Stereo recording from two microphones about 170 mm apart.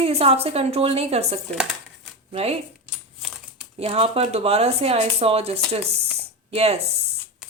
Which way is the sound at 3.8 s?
35° right (ahead or behind).